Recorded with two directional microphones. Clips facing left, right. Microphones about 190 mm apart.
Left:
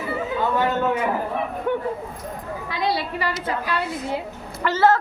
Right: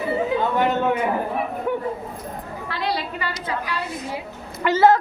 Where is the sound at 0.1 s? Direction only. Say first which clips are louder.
Right 2 dB; 20° right (ahead or behind).